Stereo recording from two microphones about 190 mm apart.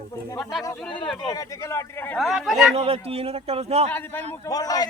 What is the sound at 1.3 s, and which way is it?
Speech, 20° left (ahead or behind).